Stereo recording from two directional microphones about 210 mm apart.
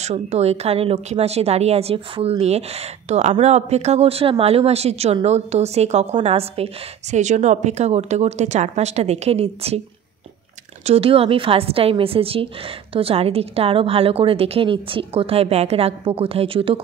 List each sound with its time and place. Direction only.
0.0 s speech: 30° right (ahead or behind)
10.9 s a woman's voice: 25° right (ahead or behind)